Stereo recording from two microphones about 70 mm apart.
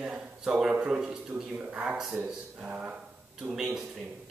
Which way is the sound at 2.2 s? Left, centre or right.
Right.